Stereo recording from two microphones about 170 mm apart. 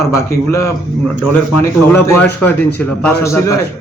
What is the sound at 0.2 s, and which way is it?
Speech, 15° left (ahead or behind).